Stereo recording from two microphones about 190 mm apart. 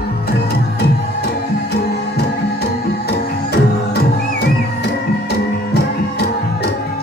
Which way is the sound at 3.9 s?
60° left (ahead or behind).